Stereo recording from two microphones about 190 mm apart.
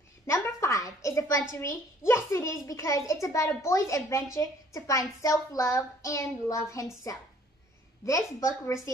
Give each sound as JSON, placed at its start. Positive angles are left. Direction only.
{"t": 0.3, "sound": "a woman's voice", "side_deg": 15}